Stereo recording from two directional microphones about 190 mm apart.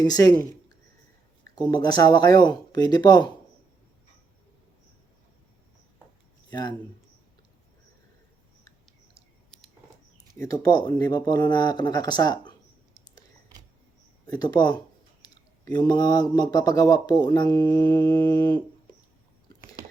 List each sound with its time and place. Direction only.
0.0 s speech: 20° left (ahead or behind)
1.5 s speech: 20° left (ahead or behind)
6.5 s speech: 20° left (ahead or behind)
10.3 s speech: 15° left (ahead or behind)
14.3 s speech: 20° left (ahead or behind)